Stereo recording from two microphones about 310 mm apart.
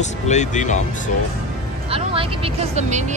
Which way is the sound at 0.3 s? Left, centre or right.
Left.